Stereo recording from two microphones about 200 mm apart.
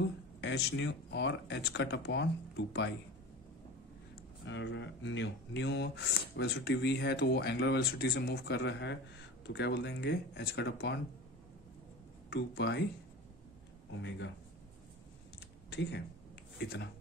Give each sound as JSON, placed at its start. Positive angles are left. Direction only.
{"t": 0.4, "sound": "speech", "side_deg": 60}
{"t": 4.5, "sound": "speech", "side_deg": 65}
{"t": 12.3, "sound": "speech", "side_deg": 55}
{"t": 14.0, "sound": "speech", "side_deg": 65}
{"t": 16.6, "sound": "speech", "side_deg": 55}